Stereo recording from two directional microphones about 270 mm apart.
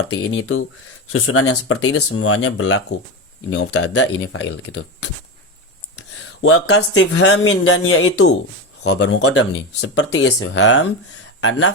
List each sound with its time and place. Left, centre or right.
0.1 s speech: left